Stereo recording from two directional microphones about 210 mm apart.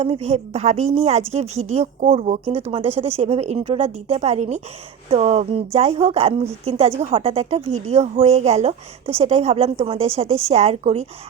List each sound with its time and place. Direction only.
0.0 s a woman's voice: 30° right (ahead or behind)